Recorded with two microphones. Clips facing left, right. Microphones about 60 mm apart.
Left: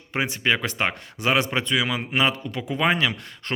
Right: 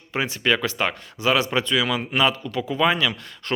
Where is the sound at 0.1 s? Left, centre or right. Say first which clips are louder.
Right 1 dB; left.